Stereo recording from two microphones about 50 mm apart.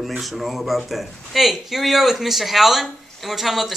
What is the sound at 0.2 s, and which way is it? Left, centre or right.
Speech, centre.